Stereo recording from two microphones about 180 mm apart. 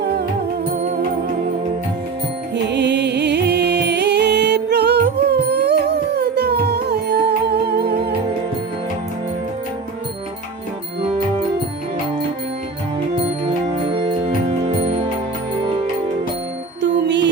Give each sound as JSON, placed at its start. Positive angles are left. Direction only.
{"t": 2.6, "sound": "music", "side_deg": -70}
{"t": 13.8, "sound": "music", "side_deg": -30}
{"t": 16.8, "sound": "music", "side_deg": -75}